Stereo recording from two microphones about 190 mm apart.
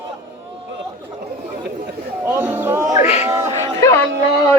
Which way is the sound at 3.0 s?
35° left (ahead or behind).